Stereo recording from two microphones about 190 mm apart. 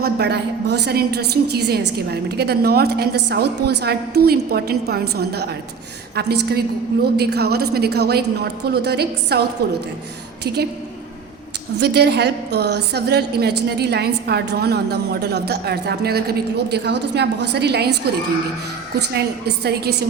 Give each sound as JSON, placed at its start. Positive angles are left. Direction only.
{"t": 0.0, "sound": "a woman's voice", "side_deg": -60}
{"t": 11.8, "sound": "a woman's voice", "side_deg": -60}
{"t": 18.9, "sound": "a woman's voice", "side_deg": -60}